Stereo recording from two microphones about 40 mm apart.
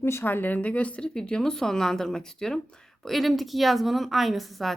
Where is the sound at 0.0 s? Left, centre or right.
Left.